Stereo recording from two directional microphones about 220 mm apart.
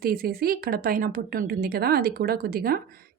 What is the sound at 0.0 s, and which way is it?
Speech, 45° right (ahead or behind).